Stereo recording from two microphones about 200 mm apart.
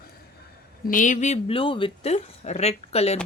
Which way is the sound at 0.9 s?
40° left (ahead or behind).